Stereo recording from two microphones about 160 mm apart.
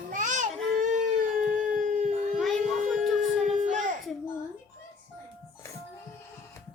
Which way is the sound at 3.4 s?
50° right (ahead or behind).